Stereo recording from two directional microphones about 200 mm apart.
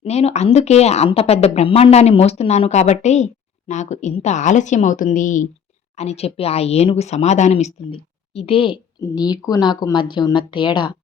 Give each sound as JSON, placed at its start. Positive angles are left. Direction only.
{"t": 0.0, "sound": "a woman's voice", "side_deg": 30}